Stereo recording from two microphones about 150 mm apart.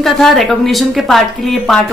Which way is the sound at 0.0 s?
Centre (ahead or behind).